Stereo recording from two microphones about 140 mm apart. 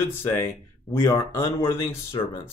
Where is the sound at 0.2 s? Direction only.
20° left (ahead or behind).